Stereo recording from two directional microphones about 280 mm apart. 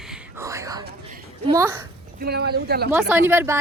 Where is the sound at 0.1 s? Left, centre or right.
Centre.